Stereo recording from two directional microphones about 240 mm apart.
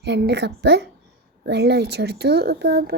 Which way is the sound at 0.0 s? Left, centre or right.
Right.